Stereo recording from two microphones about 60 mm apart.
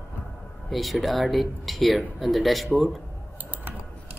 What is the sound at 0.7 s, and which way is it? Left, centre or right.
Speech, centre.